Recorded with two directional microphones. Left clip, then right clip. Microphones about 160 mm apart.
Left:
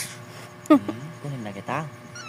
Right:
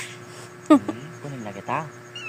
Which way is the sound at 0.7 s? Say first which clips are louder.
Right 1 dB; 5° left (ahead or behind).